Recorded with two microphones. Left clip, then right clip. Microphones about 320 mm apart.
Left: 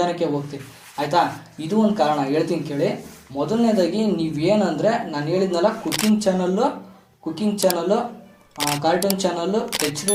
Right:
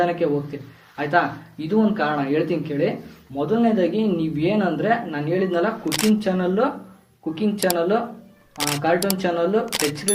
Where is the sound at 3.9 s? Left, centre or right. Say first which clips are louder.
Even; centre.